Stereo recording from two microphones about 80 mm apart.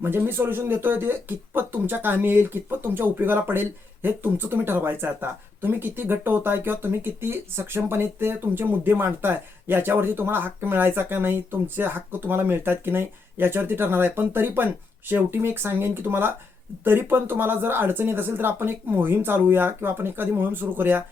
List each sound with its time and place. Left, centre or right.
0.0 s speech: right